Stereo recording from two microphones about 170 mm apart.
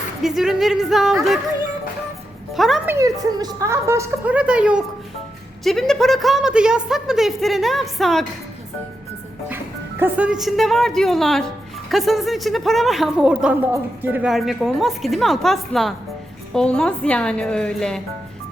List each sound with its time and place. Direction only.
0.2 s speech: centre (ahead or behind)
2.6 s speech: centre (ahead or behind)
2.8 s a woman's voice: 15° right (ahead or behind); by 8.3 s centre (ahead or behind)
10.0 s speech: 5° right (ahead or behind)